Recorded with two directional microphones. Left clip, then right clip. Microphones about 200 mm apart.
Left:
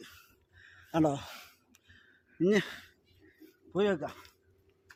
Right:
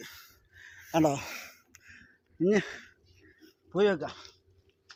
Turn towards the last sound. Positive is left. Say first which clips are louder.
# right 4 dB
turn(degrees=-40)  # may be behind; listen again after turning